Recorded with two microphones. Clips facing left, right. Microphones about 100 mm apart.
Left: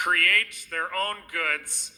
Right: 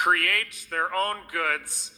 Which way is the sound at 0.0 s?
10° right (ahead or behind).